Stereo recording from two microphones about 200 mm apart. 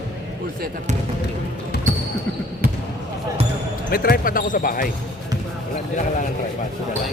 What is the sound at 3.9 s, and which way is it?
Speech, 45° left (ahead or behind).